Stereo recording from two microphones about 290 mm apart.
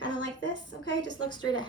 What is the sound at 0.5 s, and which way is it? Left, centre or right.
Speech, right.